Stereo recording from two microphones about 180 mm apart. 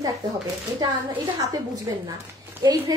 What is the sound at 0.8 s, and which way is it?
Speech, 25° right (ahead or behind).